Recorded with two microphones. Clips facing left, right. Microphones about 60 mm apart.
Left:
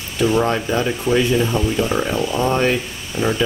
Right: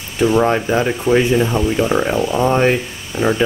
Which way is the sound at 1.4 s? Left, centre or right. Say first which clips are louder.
Right 3 dB; centre.